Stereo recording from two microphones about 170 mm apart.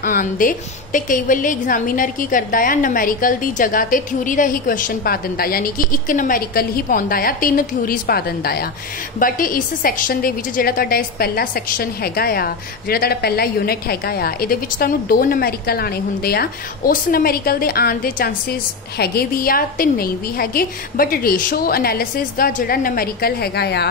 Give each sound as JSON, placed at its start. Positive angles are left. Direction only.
{"t": 0.0, "sound": "a woman's voice", "side_deg": 55}